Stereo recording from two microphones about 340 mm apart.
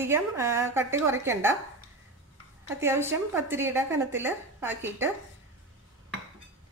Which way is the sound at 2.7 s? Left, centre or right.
Centre.